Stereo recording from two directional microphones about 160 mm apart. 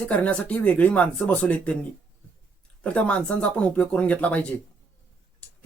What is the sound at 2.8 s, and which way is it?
Speech, 5° left (ahead or behind).